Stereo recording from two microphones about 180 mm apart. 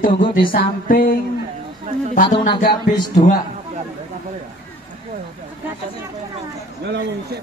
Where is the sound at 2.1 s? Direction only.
45° left (ahead or behind).